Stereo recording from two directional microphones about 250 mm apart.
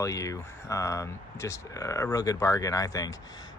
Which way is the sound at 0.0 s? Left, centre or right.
Centre.